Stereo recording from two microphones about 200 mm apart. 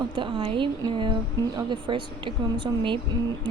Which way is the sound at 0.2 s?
25° right (ahead or behind).